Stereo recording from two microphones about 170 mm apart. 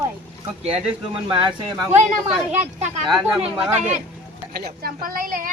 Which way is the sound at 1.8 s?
5° right (ahead or behind).